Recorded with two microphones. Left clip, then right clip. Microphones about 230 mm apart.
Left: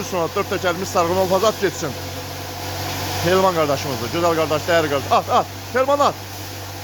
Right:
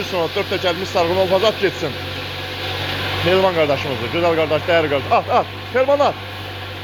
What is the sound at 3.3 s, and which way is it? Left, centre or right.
Speech, left.